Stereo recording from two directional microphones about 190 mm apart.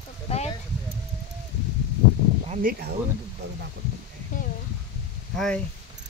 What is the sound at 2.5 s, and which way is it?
Speech, 50° right (ahead or behind).